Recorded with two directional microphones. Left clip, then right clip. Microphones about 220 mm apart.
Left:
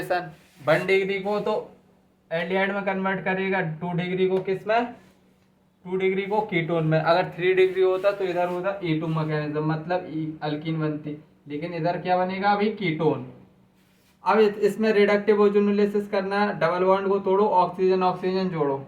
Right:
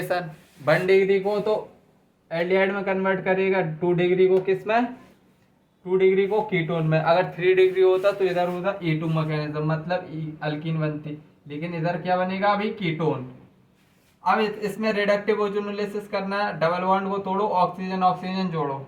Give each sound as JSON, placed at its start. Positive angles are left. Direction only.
{"t": 0.1, "sound": "a man's voice", "side_deg": 0}
{"t": 5.9, "sound": "a man's voice", "side_deg": 0}
{"t": 14.3, "sound": "a man's voice", "side_deg": 15}